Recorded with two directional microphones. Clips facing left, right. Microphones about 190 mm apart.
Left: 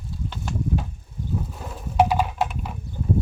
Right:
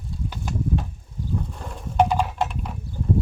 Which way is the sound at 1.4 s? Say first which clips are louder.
Even; 5° left (ahead or behind).